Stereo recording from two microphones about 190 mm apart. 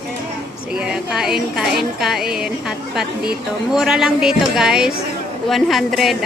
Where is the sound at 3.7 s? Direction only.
Centre (ahead or behind).